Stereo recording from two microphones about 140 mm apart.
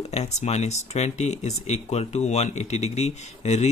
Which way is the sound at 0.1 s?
50° left (ahead or behind).